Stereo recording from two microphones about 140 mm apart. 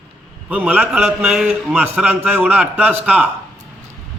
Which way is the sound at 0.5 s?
10° right (ahead or behind).